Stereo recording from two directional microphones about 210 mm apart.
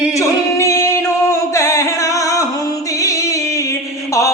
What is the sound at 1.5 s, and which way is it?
Music, 15° left (ahead or behind).